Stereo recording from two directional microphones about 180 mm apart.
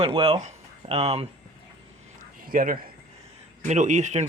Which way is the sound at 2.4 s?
50° right (ahead or behind).